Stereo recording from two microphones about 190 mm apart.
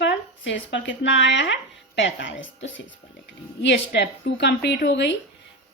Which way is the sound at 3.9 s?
65° left (ahead or behind).